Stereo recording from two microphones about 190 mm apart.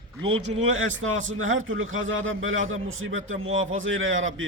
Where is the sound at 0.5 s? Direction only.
90° right.